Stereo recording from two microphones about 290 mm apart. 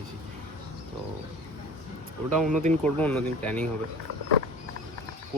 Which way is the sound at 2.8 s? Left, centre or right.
Centre.